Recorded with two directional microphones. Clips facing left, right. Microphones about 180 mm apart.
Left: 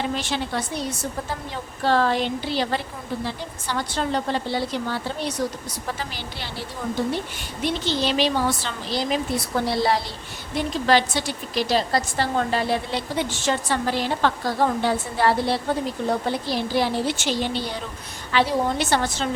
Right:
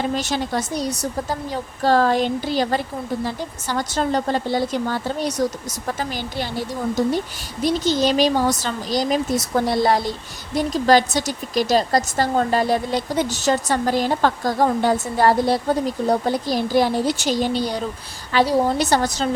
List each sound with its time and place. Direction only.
0.2 s a woman's voice: 40° right (ahead or behind)